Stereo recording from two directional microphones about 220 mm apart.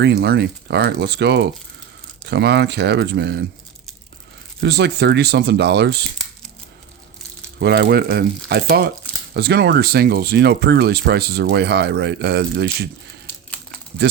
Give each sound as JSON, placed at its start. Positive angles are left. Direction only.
{"t": 0.0, "sound": "speech", "side_deg": -45}
{"t": 4.6, "sound": "speech", "side_deg": -50}
{"t": 7.6, "sound": "speech", "side_deg": -45}
{"t": 13.2, "sound": "crumpling", "side_deg": 5}
{"t": 14.0, "sound": "speech", "side_deg": -45}